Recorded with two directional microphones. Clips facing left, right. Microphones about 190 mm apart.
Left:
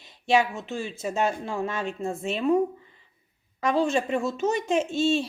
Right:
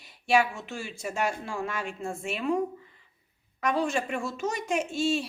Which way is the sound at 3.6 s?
30° left (ahead or behind).